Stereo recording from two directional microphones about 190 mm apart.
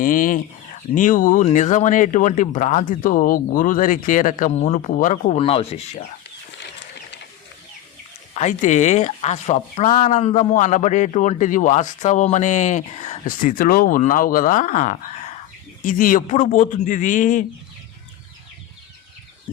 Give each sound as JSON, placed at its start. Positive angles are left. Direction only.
{"t": 0.0, "sound": "speech", "side_deg": 45}
{"t": 8.3, "sound": "speech", "side_deg": 40}